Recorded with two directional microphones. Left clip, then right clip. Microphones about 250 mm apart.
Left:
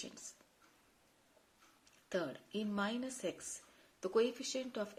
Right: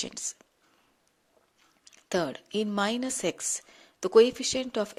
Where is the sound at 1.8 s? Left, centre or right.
Right.